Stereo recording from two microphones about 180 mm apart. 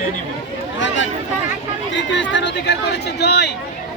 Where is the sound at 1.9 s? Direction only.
85° left; by 3.5 s 65° left (ahead or behind).